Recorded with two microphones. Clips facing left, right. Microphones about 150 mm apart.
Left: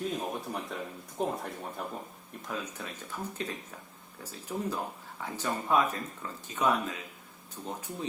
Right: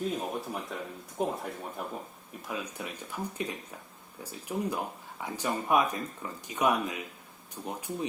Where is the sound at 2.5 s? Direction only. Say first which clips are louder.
Right 1 dB; 15° right (ahead or behind).